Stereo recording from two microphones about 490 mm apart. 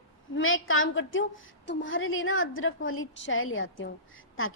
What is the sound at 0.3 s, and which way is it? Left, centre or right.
A woman's voice, left.